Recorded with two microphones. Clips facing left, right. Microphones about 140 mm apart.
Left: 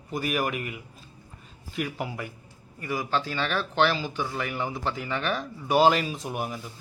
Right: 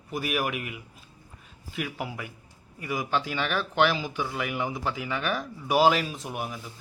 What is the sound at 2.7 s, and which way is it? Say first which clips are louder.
Speech: even; 15° right (ahead or behind).